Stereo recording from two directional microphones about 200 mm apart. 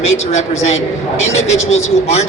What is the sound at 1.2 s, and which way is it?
Speech, 85° left.